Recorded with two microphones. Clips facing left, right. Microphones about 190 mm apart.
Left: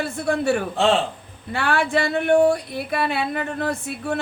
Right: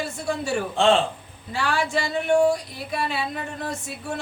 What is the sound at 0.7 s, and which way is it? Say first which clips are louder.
Speech: right 3 dB; centre (ahead or behind).